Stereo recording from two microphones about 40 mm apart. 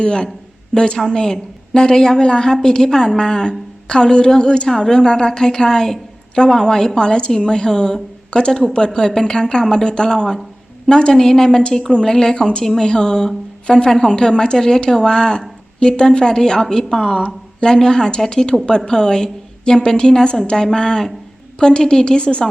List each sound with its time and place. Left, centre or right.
0.0 s a woman's voice: centre